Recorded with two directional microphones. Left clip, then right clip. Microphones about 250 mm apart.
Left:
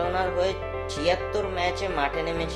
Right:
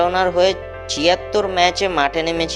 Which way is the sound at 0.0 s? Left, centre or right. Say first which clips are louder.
Right 10 dB; right.